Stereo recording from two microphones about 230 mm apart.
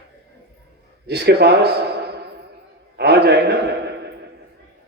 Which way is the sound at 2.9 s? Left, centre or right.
Right.